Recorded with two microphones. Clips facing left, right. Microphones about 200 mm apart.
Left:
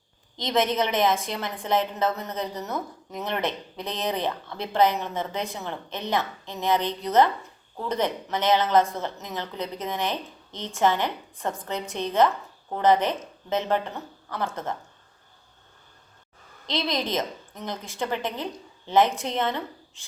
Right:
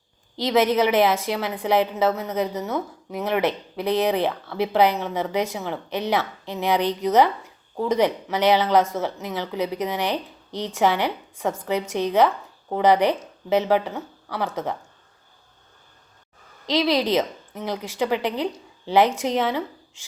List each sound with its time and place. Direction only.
0.3 s speech: 10° right (ahead or behind)
16.6 s a woman's voice: 10° right (ahead or behind)